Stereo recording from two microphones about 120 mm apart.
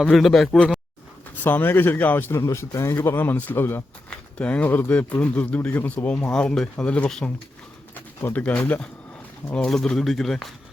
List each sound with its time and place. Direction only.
0.0 s speech: centre (ahead or behind)
1.4 s speech: 15° left (ahead or behind); by 10.5 s centre (ahead or behind)